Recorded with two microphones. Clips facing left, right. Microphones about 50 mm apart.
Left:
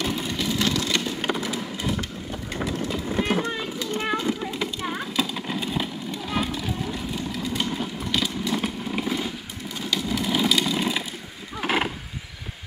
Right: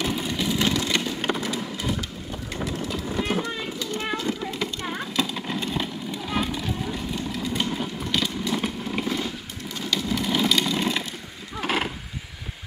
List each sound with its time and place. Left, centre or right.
0.0 s vehicle: centre
0.6 s vehicle: centre
1.0 s a sound: centre
1.5 s vehicle: centre
2.7 s vehicle: left
3.5 s a sound: centre
9.8 s vehicle: centre
11.5 s roaring cats: centre